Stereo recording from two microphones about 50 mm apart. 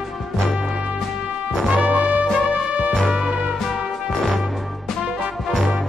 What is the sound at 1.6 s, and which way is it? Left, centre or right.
Music, right.